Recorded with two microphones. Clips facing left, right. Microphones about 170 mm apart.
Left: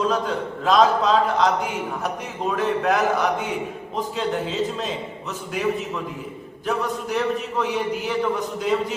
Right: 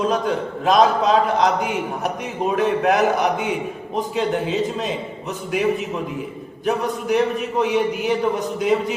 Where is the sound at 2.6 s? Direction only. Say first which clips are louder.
Right 3 dB; 15° right (ahead or behind).